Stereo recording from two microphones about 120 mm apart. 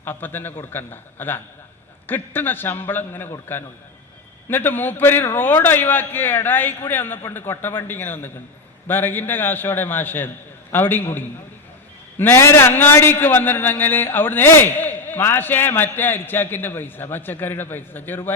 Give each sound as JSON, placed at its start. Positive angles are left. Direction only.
{"t": 0.0, "sound": "a man's voice", "side_deg": 15}
{"t": 4.4, "sound": "a man's voice", "side_deg": 15}